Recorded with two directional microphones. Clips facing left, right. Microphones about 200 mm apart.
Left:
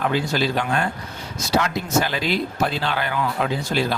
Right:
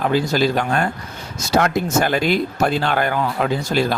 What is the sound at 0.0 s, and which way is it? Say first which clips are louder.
Speech: right 4 dB; 40° right (ahead or behind).